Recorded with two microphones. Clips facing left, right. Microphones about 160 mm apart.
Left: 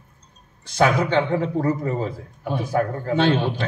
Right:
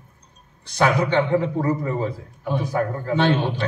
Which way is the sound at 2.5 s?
50° left (ahead or behind).